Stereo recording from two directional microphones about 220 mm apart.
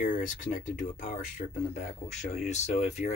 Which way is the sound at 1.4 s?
40° left (ahead or behind).